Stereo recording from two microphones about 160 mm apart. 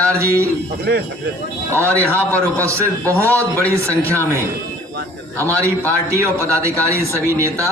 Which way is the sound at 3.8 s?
15° right (ahead or behind).